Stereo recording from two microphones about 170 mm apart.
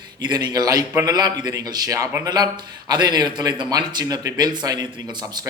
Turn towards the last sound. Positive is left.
turn(degrees=-25)  # may be behind; listen again after turning